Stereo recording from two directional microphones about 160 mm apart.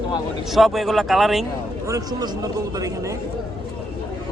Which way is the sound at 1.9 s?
25° right (ahead or behind).